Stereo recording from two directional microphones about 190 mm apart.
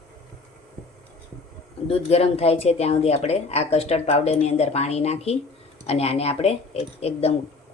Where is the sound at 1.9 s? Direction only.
35° left (ahead or behind).